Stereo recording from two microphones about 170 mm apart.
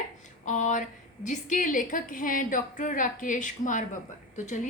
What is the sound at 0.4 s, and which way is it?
A woman's voice, 50° left (ahead or behind).